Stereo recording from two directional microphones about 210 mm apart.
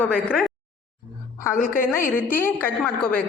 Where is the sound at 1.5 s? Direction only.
40° left (ahead or behind).